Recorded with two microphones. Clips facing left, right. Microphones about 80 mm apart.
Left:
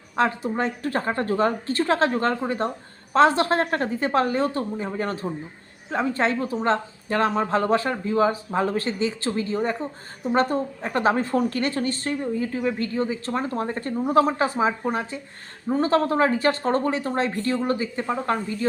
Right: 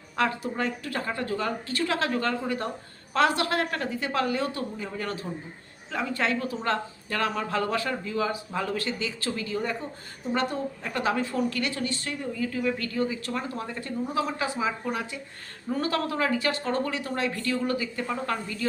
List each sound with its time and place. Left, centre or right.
0.2 s speech: left